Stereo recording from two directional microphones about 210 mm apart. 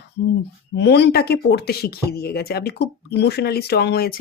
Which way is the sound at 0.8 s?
55° left (ahead or behind).